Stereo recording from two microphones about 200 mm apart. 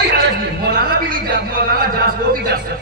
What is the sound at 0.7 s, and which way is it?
A man's voice, 50° right (ahead or behind).